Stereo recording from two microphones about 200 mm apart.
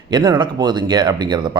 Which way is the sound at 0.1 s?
20° right (ahead or behind).